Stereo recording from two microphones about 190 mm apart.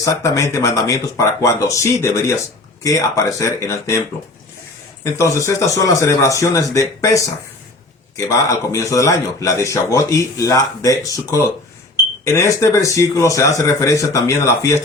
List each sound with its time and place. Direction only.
0.0 s a man's voice: 15° left (ahead or behind)
5.1 s a man's voice: 15° left (ahead or behind)